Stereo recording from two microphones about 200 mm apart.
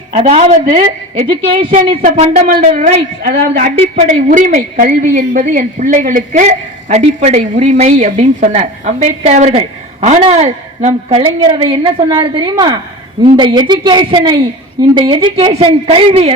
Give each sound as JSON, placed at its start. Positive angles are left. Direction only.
{"t": 0.1, "sound": "a woman's voice", "side_deg": -30}
{"t": 2.0, "sound": "a woman's voice", "side_deg": -45}